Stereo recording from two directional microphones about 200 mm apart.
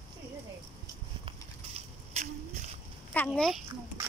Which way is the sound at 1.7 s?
35° right (ahead or behind).